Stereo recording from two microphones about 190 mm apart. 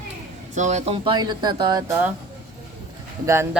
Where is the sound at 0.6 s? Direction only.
40° right (ahead or behind); by 2.1 s 10° right (ahead or behind).